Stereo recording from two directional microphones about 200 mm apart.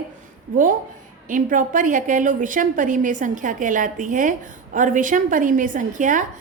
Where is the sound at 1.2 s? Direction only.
40° right (ahead or behind).